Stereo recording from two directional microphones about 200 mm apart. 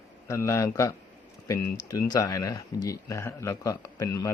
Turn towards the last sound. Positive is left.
turn(degrees=20)  # may be behind; listen again after turning